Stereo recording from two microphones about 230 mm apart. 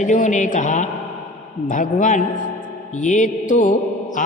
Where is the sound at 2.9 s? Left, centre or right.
Left.